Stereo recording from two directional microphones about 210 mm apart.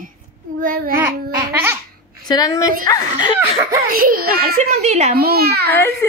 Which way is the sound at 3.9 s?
45° right (ahead or behind).